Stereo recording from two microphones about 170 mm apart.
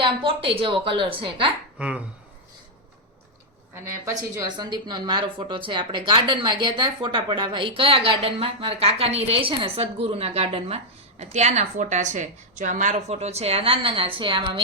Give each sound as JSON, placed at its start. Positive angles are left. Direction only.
{"t": 0.0, "sound": "a woman's voice", "side_deg": -30}
{"t": 1.8, "sound": "speech", "side_deg": -5}
{"t": 4.0, "sound": "a woman's voice", "side_deg": -20}